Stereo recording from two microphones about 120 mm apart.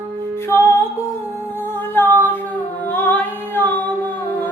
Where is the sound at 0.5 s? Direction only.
25° left (ahead or behind).